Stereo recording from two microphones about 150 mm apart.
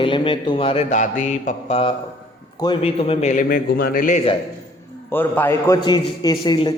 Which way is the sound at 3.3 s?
75° left (ahead or behind).